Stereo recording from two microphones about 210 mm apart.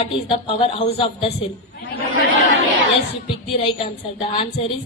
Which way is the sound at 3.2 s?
30° left (ahead or behind).